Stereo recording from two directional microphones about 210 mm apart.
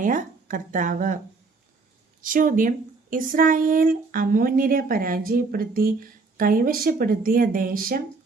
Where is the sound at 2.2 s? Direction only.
40° right (ahead or behind).